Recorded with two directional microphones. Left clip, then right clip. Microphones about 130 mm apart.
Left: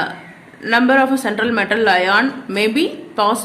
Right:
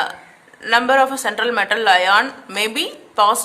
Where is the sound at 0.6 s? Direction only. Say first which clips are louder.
Even; 35° right (ahead or behind).